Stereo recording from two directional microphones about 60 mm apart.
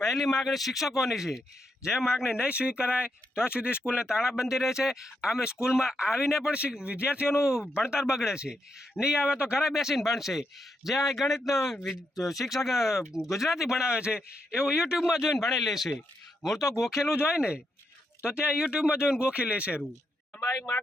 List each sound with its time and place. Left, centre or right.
0.0 s a man's voice: centre
7.3 s a man's voice: centre
16.6 s speech: left
17.2 s speech: centre
20.4 s speech: left